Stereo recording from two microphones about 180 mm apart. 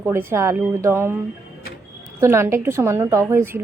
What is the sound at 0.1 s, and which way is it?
Speech, 15° right (ahead or behind).